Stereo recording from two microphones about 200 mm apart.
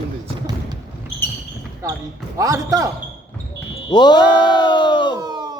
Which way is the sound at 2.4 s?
15° right (ahead or behind).